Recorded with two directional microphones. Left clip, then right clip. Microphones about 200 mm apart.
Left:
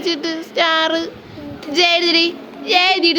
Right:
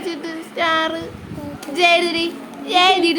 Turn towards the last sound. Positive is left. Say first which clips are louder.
# even
turn(degrees=10)  # may be behind; listen again after turning